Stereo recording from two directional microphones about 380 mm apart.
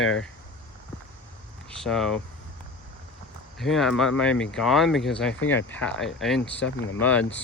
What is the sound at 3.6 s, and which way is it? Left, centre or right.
Speech, centre.